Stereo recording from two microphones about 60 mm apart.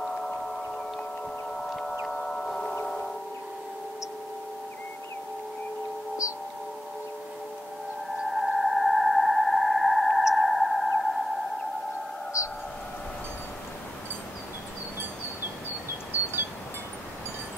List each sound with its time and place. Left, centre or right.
0.0 s whale vocalization: centre
1.5 s whale vocalization: centre
2.8 s chime: centre
8.3 s sonar: centre
12.4 s a sound: left
16.1 s a sound: right